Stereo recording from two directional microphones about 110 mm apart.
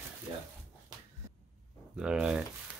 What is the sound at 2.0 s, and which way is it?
Speech, 10° right (ahead or behind).